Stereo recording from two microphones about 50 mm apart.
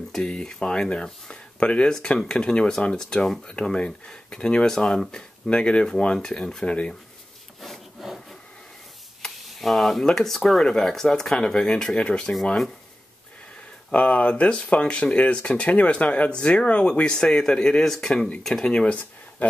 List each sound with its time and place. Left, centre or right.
0.1 s speech: centre
1.9 s speech: centre
7.6 s wood: centre
9.2 s speech: centre
13.9 s speech: left; by 18.7 s centre
18.7 s speech: left